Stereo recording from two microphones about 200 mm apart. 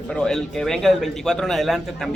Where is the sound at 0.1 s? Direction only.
5° left (ahead or behind).